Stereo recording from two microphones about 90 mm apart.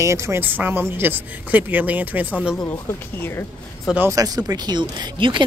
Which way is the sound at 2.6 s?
35° left (ahead or behind).